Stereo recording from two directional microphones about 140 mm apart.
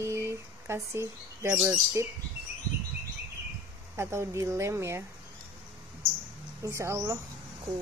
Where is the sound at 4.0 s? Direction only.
20° right (ahead or behind).